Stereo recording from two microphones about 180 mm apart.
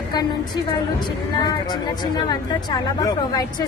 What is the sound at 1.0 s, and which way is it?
Speech, 25° left (ahead or behind).